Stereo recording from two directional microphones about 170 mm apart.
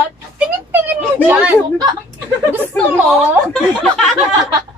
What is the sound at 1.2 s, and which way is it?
Speech, 10° right (ahead or behind).